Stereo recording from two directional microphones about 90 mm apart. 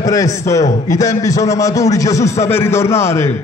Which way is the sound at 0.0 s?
40° left (ahead or behind).